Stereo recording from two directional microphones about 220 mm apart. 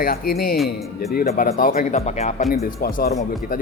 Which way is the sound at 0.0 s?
40° left (ahead or behind).